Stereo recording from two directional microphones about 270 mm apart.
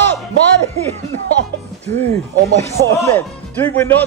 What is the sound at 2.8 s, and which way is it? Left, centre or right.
A man's voice, centre.